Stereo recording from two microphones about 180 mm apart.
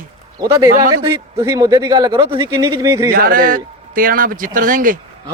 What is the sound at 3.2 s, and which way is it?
Speech, 50° right (ahead or behind).